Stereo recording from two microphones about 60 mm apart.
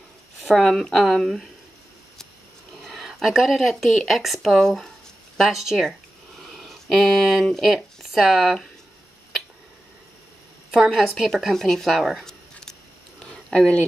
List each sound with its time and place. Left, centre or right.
0.7 s speech: centre
2.8 s speech: centre
5.4 s speech: centre
6.5 s a sound: centre
7.6 s speech: centre
10.7 s speech: centre
12.3 s a sound: centre